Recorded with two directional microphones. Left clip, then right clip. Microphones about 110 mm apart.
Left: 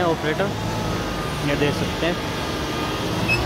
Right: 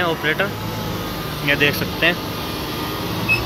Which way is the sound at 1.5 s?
15° left (ahead or behind).